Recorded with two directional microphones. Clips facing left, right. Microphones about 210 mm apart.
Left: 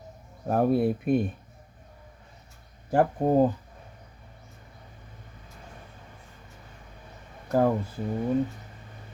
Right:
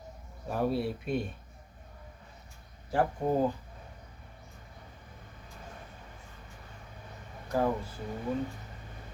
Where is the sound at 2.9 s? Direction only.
50° left (ahead or behind).